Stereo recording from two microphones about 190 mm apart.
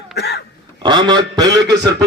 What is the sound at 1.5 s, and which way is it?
Speech, 65° right (ahead or behind).